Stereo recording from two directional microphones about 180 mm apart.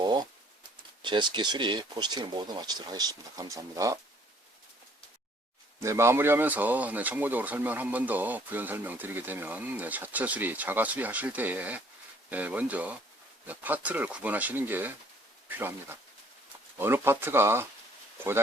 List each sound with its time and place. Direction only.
0.0 s typewriter: 25° right (ahead or behind)
1.0 s speech: 25° right (ahead or behind)
5.8 s speech: 15° right (ahead or behind)
16.7 s speech: 15° right (ahead or behind)